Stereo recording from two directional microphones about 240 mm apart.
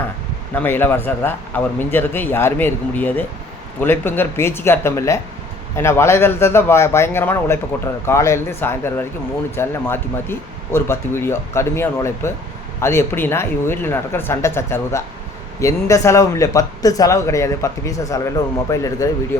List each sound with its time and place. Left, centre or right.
0.5 s speech: centre